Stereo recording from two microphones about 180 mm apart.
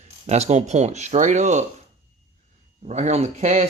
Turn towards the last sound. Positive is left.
turn(degrees=-40)  # may be behind; listen again after turning